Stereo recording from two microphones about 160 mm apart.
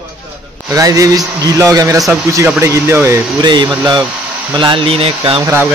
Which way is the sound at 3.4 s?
30° right (ahead or behind).